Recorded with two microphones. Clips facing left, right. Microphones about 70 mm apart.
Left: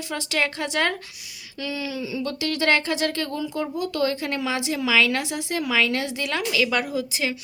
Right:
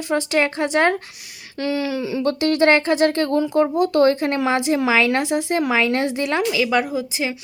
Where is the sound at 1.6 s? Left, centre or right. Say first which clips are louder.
Right 7 dB; right.